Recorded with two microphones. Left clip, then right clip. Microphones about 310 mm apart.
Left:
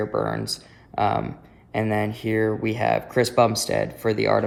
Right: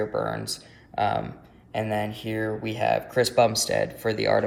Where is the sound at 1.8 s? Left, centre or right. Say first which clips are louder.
Left 3 dB; left.